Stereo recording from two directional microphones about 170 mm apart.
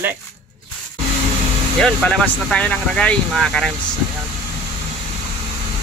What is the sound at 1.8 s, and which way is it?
Speech, 5° left (ahead or behind).